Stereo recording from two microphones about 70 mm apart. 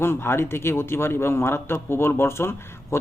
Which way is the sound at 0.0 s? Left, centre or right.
Left.